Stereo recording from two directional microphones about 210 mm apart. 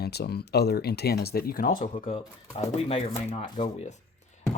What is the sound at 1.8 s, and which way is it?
Speech, 35° left (ahead or behind).